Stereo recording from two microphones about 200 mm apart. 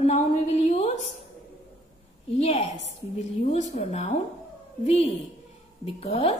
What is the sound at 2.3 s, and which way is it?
A woman's voice, 30° left (ahead or behind).